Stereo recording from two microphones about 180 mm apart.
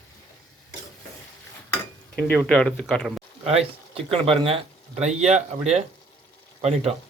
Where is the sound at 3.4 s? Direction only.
35° right (ahead or behind).